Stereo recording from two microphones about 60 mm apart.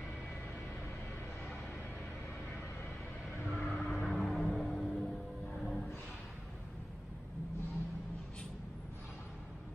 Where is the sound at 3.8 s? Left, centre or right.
Left.